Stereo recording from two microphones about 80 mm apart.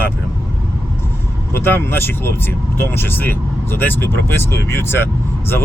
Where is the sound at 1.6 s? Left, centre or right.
Left.